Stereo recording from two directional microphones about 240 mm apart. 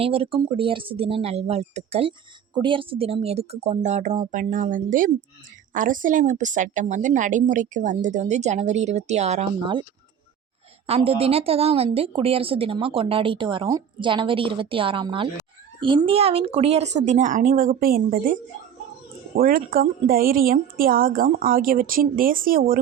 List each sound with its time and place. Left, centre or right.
0.0 s a woman's voice: right
10.8 s a woman's voice: right
19.4 s a woman's voice: right